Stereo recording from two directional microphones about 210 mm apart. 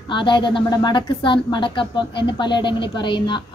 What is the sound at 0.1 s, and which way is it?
A woman's voice, 20° left (ahead or behind).